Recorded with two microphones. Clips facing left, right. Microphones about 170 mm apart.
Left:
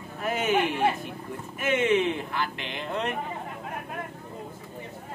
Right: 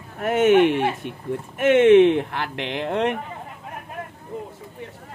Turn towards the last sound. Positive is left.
turn(degrees=-70)  # may be behind; listen again after turning